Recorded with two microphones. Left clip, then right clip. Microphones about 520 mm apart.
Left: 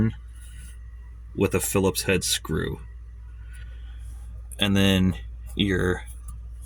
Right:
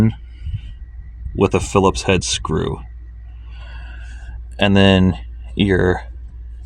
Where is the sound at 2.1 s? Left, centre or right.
Left.